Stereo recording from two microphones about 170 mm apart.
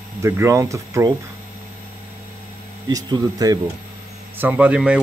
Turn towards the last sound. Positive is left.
turn(degrees=-5)  # may be behind; listen again after turning